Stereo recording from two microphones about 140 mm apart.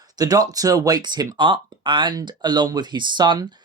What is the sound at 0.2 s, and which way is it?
Speech, 25° right (ahead or behind).